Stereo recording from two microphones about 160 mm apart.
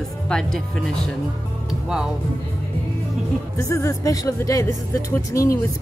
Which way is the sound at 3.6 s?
20° left (ahead or behind).